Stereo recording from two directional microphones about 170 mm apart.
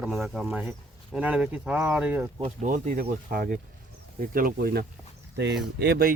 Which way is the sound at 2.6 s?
50° right (ahead or behind).